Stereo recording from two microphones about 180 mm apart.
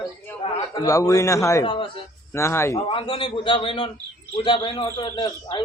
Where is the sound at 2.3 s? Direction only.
15° left (ahead or behind).